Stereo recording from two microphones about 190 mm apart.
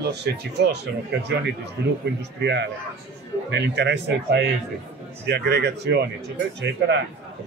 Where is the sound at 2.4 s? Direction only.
65° right (ahead or behind).